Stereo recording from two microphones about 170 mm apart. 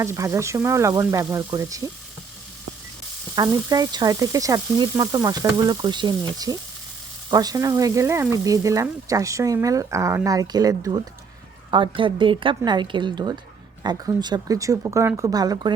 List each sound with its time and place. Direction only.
0.0 s speech: 15° right (ahead or behind)
3.3 s speech: 20° right (ahead or behind)